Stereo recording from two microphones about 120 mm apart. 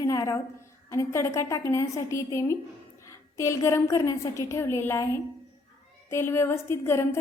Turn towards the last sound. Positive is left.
turn(degrees=20)  # may be behind; listen again after turning